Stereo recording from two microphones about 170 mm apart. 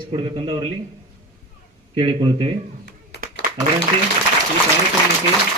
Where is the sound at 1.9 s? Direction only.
30° right (ahead or behind).